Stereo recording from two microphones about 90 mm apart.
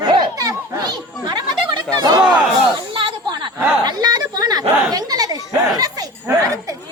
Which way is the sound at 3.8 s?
50° right (ahead or behind).